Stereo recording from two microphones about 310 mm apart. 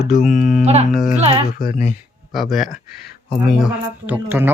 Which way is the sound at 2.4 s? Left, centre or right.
Centre.